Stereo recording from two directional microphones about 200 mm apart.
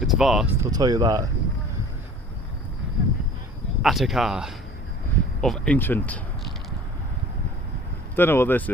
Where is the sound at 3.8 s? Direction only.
Centre (ahead or behind).